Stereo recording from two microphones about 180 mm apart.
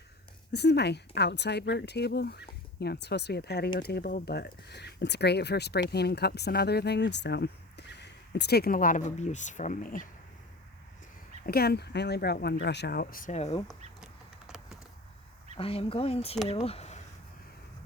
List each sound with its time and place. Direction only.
0.5 s speech: 65° left (ahead or behind); by 10.1 s 50° left (ahead or behind)
11.4 s speech: 60° left (ahead or behind); by 13.6 s 35° left (ahead or behind)
13.7 s duck: 5° right (ahead or behind)
15.5 s speech: 30° left (ahead or behind)